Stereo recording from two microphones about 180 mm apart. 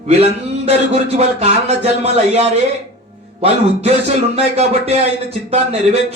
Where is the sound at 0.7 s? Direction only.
35° right (ahead or behind).